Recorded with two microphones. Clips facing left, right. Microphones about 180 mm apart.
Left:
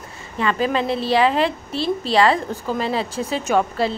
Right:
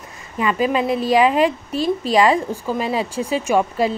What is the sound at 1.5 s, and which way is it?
Speech, 35° left (ahead or behind).